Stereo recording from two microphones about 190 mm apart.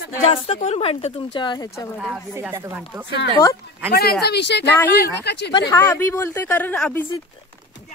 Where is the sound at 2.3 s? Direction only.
15° right (ahead or behind).